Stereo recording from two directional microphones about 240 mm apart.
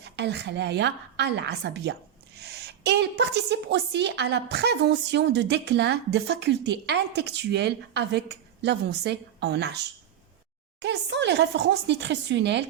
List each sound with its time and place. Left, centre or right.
0.0 s a woman's voice: right